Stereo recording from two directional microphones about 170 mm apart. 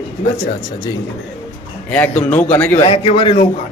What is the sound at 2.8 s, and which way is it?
Speech, 30° left (ahead or behind).